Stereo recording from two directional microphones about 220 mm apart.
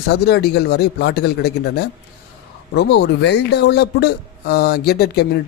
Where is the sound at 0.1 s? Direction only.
45° left (ahead or behind).